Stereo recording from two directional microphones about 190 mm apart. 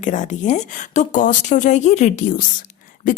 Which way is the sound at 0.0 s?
40° left (ahead or behind).